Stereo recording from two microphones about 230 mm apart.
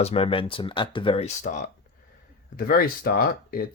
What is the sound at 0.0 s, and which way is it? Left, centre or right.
Speech, left.